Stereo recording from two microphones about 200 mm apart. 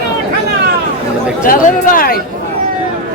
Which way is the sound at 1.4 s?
45° left (ahead or behind).